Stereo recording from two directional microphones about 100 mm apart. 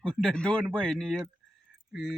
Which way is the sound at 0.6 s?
15° right (ahead or behind).